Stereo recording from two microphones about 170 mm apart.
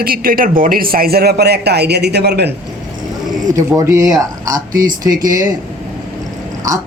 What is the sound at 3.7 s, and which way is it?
Speech, 15° right (ahead or behind).